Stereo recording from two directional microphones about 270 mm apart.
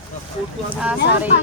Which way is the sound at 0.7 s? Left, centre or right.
Centre.